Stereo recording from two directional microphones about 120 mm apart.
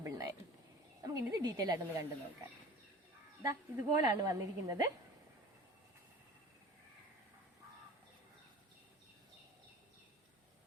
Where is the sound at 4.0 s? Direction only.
30° right (ahead or behind).